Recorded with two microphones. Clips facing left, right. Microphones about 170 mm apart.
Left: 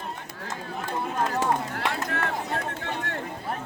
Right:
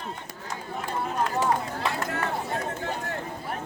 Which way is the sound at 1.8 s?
70° left (ahead or behind).